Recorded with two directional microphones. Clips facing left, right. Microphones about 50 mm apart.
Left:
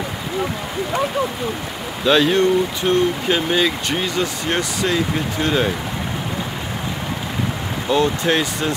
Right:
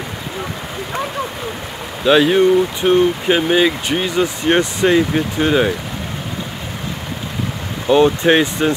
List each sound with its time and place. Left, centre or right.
2.0 s speech: centre
2.8 s speech: right
4.5 s speech: right
7.9 s speech: right